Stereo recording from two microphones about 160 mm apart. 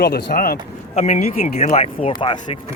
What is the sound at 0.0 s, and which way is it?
Speech, 70° left (ahead or behind).